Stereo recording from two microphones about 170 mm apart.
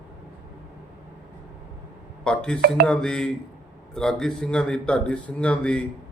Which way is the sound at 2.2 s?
5° left (ahead or behind).